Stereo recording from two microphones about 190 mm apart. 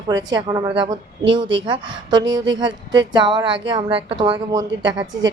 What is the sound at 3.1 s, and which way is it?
A woman's voice, 25° right (ahead or behind).